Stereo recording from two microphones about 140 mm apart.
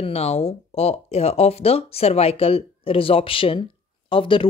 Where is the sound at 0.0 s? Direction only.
45° left (ahead or behind).